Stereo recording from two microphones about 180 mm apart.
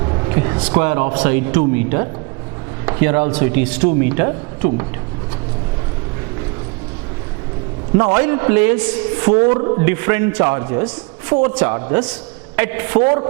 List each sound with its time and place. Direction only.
0.0 s a sound: 25° right (ahead or behind)
0.6 s speech: 15° right (ahead or behind)
7.9 s speech: 15° right (ahead or behind)
9.6 s a man's voice: 25° right (ahead or behind)
9.8 s a woman's voice: 15° right (ahead or behind)